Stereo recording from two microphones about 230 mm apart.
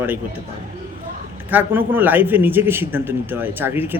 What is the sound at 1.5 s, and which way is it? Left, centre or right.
A man's voice, centre.